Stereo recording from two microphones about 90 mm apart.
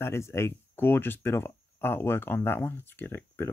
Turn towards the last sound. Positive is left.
turn(degrees=25)  # may be behind; listen again after turning